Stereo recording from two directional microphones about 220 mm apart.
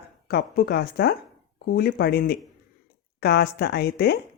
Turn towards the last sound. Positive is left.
turn(degrees=45)  # may be behind; listen again after turning